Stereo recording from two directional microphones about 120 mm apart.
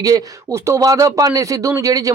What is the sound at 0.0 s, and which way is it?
Speech, 25° right (ahead or behind).